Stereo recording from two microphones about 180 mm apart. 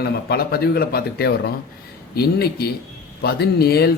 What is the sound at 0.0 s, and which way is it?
Speech, 60° left (ahead or behind).